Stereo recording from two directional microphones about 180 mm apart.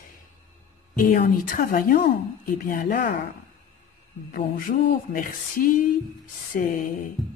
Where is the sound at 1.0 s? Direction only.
50° left (ahead or behind).